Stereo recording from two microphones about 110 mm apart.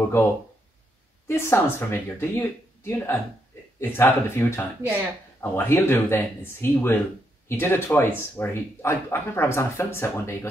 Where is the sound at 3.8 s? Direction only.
20° left (ahead or behind).